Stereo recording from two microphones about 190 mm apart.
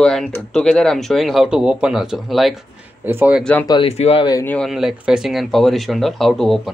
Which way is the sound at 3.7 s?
30° left (ahead or behind).